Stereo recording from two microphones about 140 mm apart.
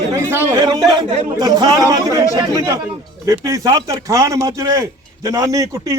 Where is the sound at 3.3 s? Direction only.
25° right (ahead or behind).